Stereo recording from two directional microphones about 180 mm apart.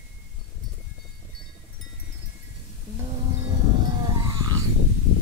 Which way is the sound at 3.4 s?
20° right (ahead or behind).